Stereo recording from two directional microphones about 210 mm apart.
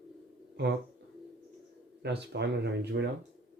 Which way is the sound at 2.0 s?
55° right (ahead or behind).